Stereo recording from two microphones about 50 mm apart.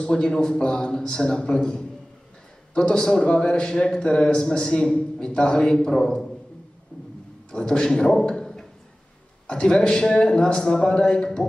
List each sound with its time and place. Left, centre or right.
0.0 s a man's voice: centre
7.5 s a man's voice: centre